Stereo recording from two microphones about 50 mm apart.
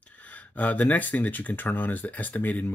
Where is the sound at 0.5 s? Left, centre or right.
Left.